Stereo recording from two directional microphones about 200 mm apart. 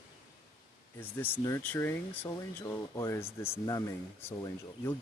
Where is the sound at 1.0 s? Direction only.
10° left (ahead or behind).